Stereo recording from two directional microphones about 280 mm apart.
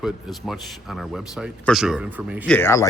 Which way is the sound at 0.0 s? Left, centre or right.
Centre.